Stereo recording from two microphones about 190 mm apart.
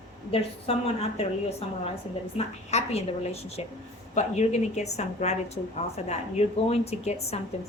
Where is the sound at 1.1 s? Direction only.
35° left (ahead or behind).